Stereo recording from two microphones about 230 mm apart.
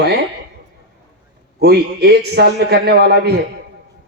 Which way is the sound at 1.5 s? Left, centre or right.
Right.